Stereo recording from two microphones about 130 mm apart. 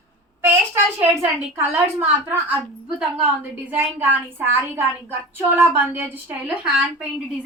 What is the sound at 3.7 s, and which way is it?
A woman's voice, 15° right (ahead or behind).